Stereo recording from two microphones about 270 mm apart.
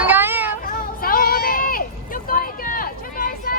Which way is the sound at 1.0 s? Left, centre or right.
Left.